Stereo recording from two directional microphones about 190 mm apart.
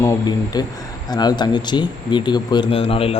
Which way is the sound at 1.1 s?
20° left (ahead or behind).